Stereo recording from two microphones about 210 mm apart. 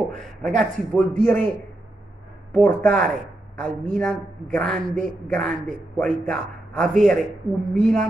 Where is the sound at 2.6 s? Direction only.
5° left (ahead or behind).